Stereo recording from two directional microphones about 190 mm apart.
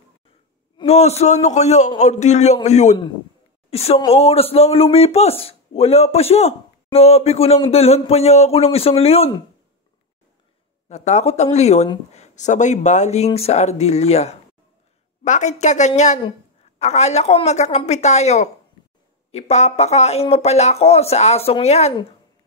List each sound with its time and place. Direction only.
0.7 s speech: 35° left (ahead or behind)
10.9 s speech: 35° left (ahead or behind)